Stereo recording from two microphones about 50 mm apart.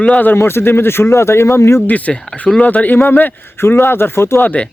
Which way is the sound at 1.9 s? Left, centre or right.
Left.